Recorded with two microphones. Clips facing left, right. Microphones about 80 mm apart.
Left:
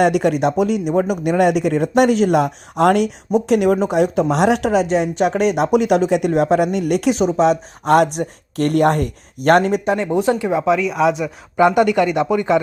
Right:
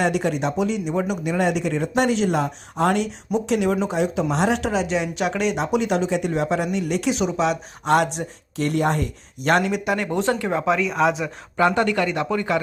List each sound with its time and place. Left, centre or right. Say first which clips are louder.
0.0 s speech: left 6 dB; left
7.2 s speech: left 7 dB; left
10.1 s speech: left 5 dB; centre
10.7 s speech: left 3 dB; centre
11.5 s speech: left 6 dB; centre